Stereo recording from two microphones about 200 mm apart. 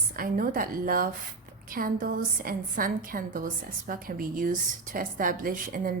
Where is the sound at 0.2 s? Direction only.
45° right (ahead or behind).